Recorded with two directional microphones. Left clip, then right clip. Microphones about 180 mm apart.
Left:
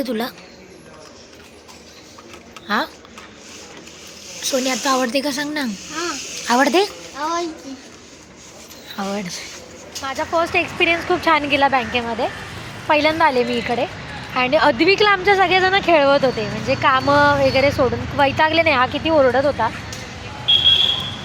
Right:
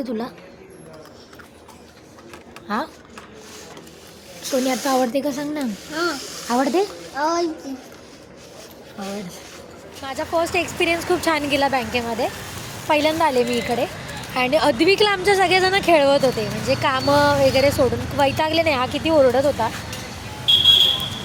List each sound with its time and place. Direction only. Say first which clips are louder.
0.0 s speech: left 4 dB; centre (ahead or behind)
2.6 s speech: left 5 dB; centre (ahead or behind)
4.4 s speech: left 2 dB; 5° right (ahead or behind)
7.2 s a child's voice: right 2 dB; 20° right (ahead or behind)
10.0 s speech: left 2 dB; centre (ahead or behind)